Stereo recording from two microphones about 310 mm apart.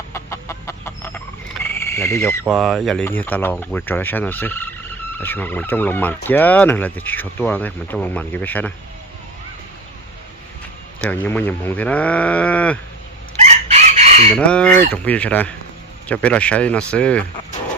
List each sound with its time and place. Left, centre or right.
0.1 s chicken: centre
1.6 s a sound: centre
2.4 s speech: centre
11.0 s speech: centre
13.4 s chicken: right
14.3 s speech: centre